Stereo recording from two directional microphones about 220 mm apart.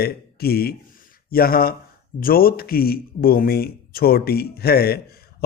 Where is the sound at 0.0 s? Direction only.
45° left (ahead or behind).